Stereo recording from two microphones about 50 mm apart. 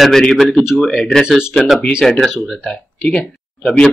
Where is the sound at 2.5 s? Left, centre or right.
Centre.